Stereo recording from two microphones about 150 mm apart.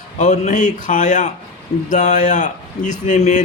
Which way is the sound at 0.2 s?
50° left (ahead or behind).